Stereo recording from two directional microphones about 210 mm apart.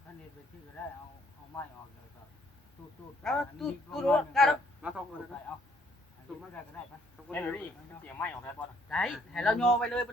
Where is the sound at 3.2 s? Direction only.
Centre (ahead or behind).